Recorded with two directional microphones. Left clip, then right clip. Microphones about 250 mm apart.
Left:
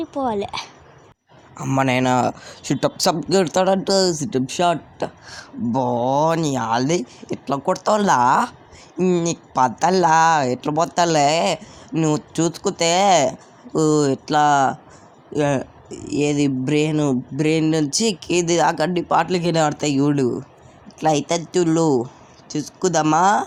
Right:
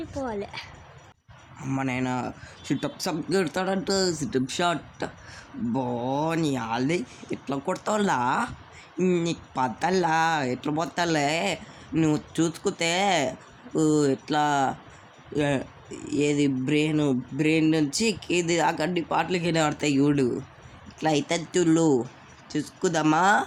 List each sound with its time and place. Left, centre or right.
0.0 s speech: centre